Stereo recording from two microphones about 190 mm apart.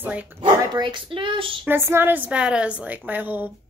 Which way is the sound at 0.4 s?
25° right (ahead or behind).